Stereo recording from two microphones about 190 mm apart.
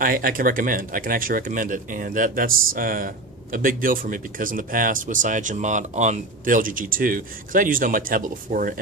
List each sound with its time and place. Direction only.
0.0 s speech: 50° right (ahead or behind)